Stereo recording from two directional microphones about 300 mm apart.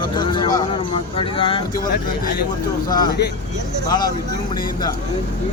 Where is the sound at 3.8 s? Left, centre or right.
Centre.